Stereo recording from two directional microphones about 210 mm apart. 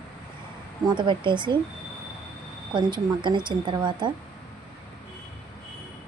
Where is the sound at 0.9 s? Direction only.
20° right (ahead or behind).